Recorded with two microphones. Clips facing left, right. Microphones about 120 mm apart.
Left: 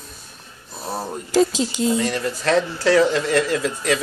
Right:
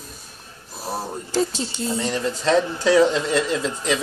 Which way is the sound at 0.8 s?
Centre (ahead or behind).